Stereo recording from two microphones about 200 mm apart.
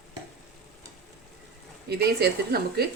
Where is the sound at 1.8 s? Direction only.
50° right (ahead or behind).